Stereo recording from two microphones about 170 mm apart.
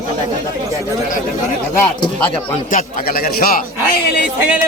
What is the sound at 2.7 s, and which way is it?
Speech, 55° left (ahead or behind).